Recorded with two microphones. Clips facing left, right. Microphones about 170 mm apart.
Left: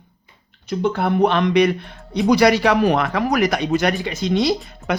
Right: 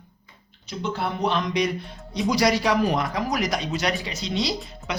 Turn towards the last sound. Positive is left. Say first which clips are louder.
# left 8 dB
turn(degrees=55)  # may be behind; listen again after turning